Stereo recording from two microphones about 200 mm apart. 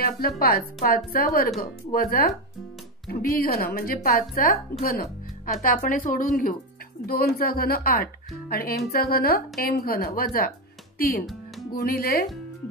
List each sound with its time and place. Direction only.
0.4 s speech: 50° left (ahead or behind)